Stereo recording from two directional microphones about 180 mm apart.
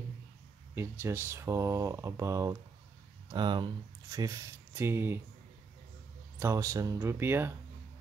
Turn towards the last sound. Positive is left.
turn(degrees=-10)  # may be behind; listen again after turning